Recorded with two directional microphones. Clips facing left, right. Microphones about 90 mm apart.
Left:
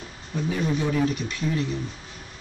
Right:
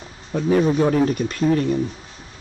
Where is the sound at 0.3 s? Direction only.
50° right (ahead or behind).